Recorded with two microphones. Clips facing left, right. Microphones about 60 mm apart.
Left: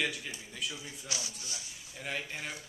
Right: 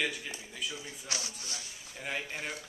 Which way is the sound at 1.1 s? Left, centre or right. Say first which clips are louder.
Right 2 dB; right.